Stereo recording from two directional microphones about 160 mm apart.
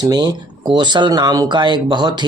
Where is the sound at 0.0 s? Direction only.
25° right (ahead or behind).